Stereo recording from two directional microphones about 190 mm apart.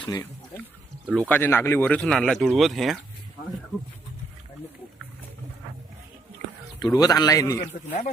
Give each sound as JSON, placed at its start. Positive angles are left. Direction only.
{"t": 0.0, "sound": "speech", "side_deg": 15}
{"t": 1.0, "sound": "speech", "side_deg": -5}
{"t": 1.3, "sound": "speech", "side_deg": 10}
{"t": 6.8, "sound": "a man's voice", "side_deg": 20}